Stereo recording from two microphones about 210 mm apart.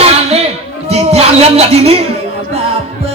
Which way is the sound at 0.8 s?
30° right (ahead or behind).